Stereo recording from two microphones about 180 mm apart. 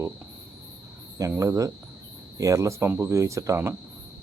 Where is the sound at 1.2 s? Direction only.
15° right (ahead or behind).